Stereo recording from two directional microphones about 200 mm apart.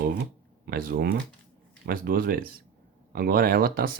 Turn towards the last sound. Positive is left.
turn(degrees=-50)  # may be behind; listen again after turning